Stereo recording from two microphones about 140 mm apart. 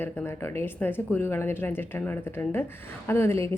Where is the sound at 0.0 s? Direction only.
15° left (ahead or behind).